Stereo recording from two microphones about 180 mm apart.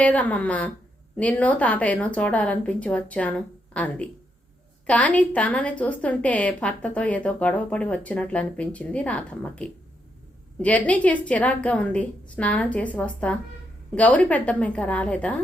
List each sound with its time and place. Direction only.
0.0 s a woman's voice: 10° left (ahead or behind)